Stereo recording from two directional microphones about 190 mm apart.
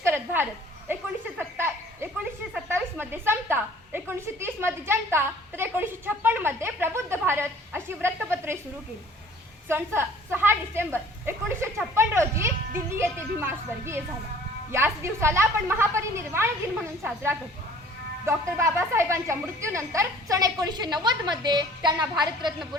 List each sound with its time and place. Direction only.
0.0 s a sound: 10° right (ahead or behind)
9.6 s a woman's voice: 10° right (ahead or behind)
15.0 s a woman's voice: 15° right (ahead or behind)
18.3 s a woman's voice: 15° right (ahead or behind)